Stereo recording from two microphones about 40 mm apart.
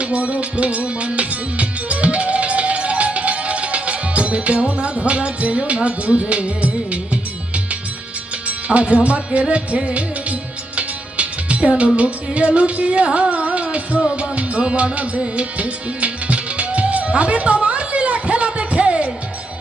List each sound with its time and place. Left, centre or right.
0.0 s music: right